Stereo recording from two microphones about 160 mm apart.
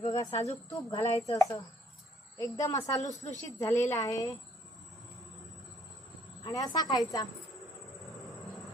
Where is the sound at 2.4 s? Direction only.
20° left (ahead or behind).